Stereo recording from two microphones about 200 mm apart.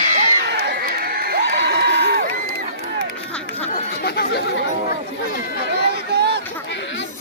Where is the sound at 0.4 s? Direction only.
55° right (ahead or behind).